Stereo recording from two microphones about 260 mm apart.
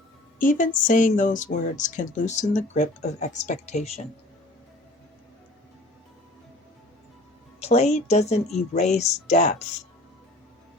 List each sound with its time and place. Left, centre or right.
0.3 s speech: left
7.6 s speech: left